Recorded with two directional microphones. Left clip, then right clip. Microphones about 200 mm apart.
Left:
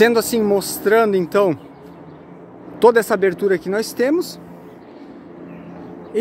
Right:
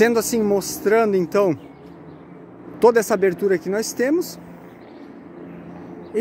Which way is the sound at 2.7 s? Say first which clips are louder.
Left 2 dB; 10° right (ahead or behind).